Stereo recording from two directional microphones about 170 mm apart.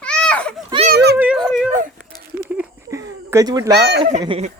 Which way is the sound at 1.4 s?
Centre (ahead or behind).